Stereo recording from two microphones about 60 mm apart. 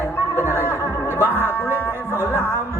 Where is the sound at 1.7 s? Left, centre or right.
Left.